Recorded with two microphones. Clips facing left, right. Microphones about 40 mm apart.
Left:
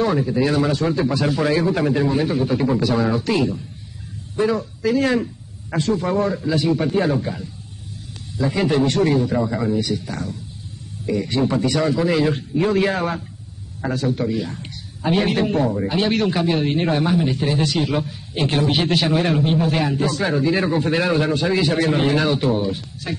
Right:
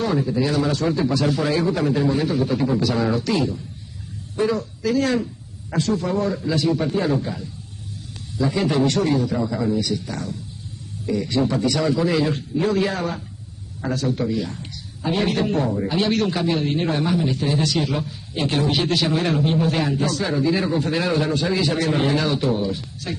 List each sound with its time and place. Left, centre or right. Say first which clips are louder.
0.0 s a man's voice: left 2 dB; left
3.0 s speech: left 1 dB; centre
4.5 s a man's voice: left 3 dB; centre
7.2 s speech: left 1 dB; centre
8.8 s a man's voice: left 2 dB; left
11.2 s a man's voice: even; left
11.9 s a man's voice: left 1 dB; centre; by 13.2 s left
13.7 s speech: left 1 dB; centre
14.6 s a sound: left 2 dB; left
15.4 s a man's voice: left 2 dB; centre
19.1 s speech: left 2 dB; centre
20.2 s a man's voice: left 3 dB; left
21.0 s a man's voice: left 2 dB; centre